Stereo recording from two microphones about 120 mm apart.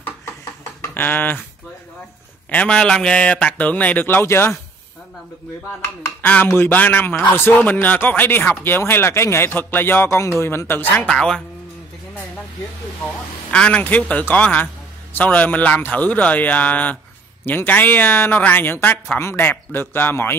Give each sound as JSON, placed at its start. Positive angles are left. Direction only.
{"t": 0.9, "sound": "speech", "side_deg": 15}
{"t": 2.5, "sound": "speech", "side_deg": 10}
{"t": 6.2, "sound": "speech", "side_deg": 15}
{"t": 13.0, "sound": "speech", "side_deg": 10}